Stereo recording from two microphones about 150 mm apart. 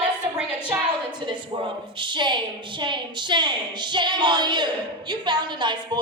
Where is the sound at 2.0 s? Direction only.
30° right (ahead or behind).